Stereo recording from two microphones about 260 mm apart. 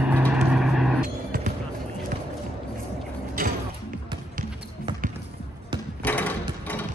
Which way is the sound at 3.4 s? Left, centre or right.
Right.